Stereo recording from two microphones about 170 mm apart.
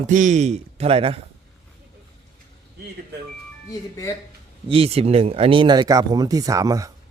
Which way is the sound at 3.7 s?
20° left (ahead or behind).